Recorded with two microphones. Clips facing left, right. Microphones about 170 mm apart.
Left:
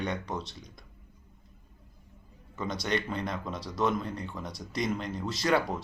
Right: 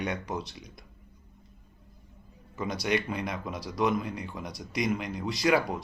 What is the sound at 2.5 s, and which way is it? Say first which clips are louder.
A man's voice: right 2 dB; 5° right (ahead or behind).